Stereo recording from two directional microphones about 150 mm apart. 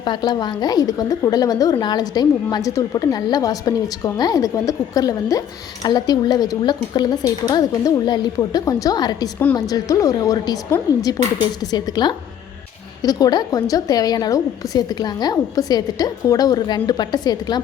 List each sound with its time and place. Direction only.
0.0 s a woman's voice: 30° left (ahead or behind)
11.6 s a woman's voice: 25° left (ahead or behind)